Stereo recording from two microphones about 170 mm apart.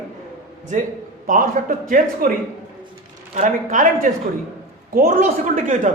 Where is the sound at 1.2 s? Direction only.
50° right (ahead or behind).